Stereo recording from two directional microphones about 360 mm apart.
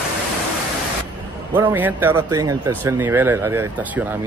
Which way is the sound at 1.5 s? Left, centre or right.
Centre.